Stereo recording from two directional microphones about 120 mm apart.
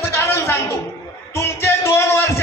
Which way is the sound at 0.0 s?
20° left (ahead or behind).